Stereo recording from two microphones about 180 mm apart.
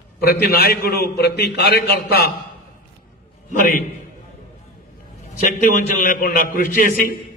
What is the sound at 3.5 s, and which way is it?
Speech, 45° left (ahead or behind).